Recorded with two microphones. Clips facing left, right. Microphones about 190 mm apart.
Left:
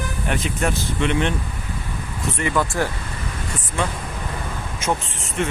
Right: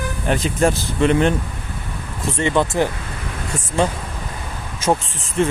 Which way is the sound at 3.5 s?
35° right (ahead or behind).